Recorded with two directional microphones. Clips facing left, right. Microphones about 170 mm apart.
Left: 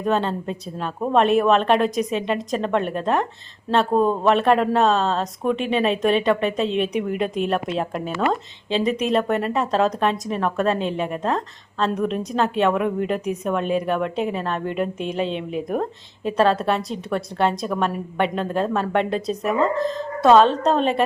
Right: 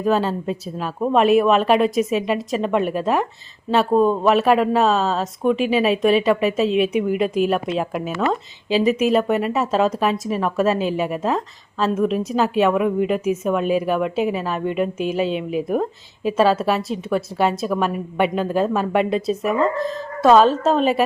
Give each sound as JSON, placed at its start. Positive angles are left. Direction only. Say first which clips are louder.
{"t": 0.0, "sound": "speech", "louder": "right 2 dB", "side_deg": -5}